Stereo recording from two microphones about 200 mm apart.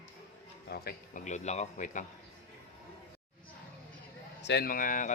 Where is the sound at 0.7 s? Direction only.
50° left (ahead or behind).